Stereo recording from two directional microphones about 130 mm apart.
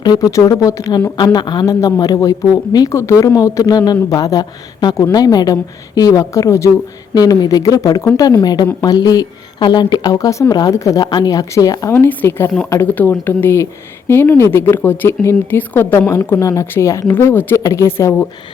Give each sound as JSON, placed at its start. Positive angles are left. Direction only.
{"t": 0.0, "sound": "speech", "side_deg": 30}